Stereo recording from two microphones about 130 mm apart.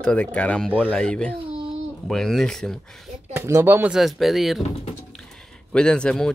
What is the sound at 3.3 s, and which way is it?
Speech, 20° right (ahead or behind).